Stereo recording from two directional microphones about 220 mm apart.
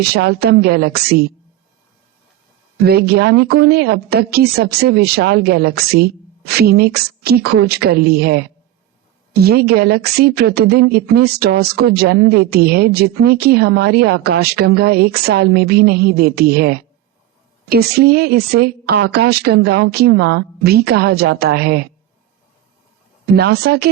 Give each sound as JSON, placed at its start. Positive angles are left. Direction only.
{"t": 0.0, "sound": "a woman's voice", "side_deg": -45}
{"t": 2.7, "sound": "a woman's voice", "side_deg": -45}
{"t": 23.2, "sound": "a woman's voice", "side_deg": -45}